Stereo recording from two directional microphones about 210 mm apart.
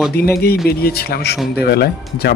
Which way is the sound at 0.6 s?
50° left (ahead or behind).